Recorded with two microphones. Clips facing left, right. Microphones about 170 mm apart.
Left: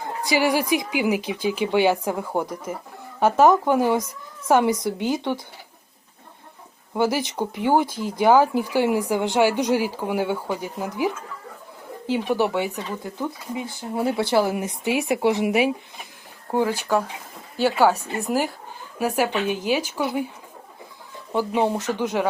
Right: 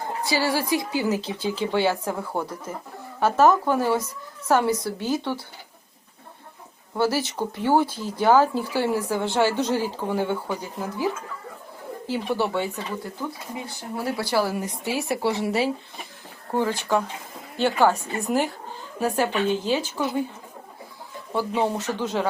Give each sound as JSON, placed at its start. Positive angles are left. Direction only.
{"t": 0.0, "sound": "speech", "side_deg": 15}
{"t": 6.9, "sound": "speech", "side_deg": 15}
{"t": 21.3, "sound": "speech", "side_deg": 10}